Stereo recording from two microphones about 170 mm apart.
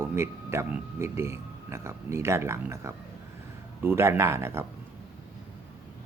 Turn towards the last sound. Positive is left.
turn(degrees=-15)  # may be behind; listen again after turning